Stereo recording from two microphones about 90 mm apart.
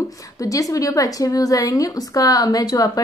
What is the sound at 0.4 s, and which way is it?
A woman's voice, 40° left (ahead or behind).